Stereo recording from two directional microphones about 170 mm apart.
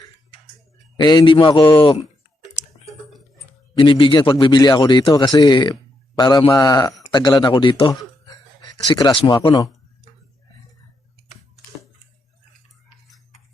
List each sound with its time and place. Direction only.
0.9 s a man's voice: 25° left (ahead or behind)
3.8 s a man's voice: 30° left (ahead or behind)
9.0 s a man's voice: 25° left (ahead or behind)